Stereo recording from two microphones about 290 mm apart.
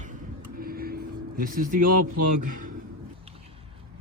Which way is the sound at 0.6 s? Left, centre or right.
Right.